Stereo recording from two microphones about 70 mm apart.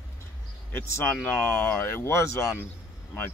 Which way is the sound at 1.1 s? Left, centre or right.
Left.